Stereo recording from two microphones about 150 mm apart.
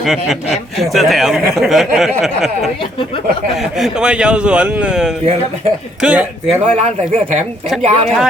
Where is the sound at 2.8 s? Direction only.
35° left (ahead or behind).